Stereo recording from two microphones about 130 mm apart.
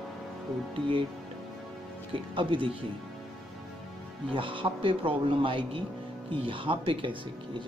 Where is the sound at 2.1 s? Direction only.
40° right (ahead or behind).